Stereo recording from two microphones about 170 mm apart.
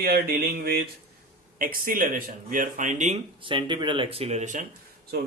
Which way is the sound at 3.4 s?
30° right (ahead or behind).